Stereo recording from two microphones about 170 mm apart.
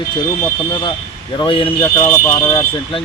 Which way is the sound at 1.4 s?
30° left (ahead or behind).